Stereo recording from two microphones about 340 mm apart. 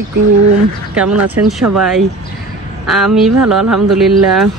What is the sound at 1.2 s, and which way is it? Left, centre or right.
Speech, right.